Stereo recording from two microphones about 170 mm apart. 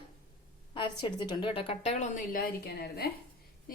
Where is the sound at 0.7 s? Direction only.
30° left (ahead or behind).